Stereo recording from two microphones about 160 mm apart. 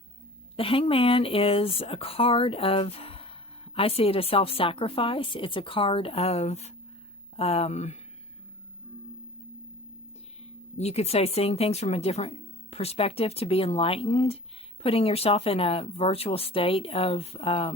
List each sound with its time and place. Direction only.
0.5 s a woman's voice: 35° left (ahead or behind)
10.8 s a woman's voice: 40° left (ahead or behind)